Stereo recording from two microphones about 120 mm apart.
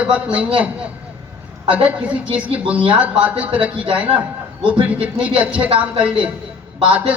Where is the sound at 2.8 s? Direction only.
10° right (ahead or behind).